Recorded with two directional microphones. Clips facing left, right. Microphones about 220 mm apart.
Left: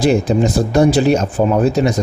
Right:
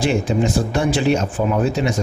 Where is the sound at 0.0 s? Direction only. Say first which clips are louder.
Left 5 dB; 40° left (ahead or behind).